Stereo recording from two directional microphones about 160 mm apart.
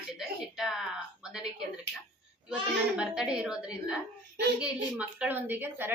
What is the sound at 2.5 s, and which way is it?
A child's voice, 5° right (ahead or behind).